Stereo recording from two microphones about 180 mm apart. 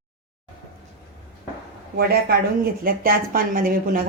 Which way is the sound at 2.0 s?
60° right (ahead or behind).